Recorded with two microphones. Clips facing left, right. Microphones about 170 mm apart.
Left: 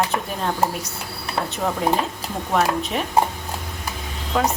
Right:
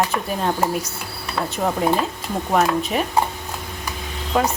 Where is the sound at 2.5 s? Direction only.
5° right (ahead or behind).